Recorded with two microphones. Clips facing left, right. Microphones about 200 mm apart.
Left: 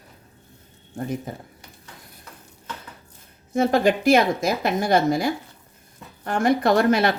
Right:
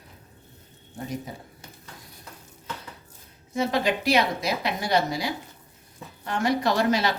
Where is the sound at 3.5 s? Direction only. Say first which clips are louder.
Left 6 dB; 50° left (ahead or behind).